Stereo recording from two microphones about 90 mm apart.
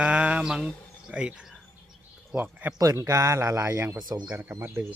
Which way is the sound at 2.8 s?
35° right (ahead or behind).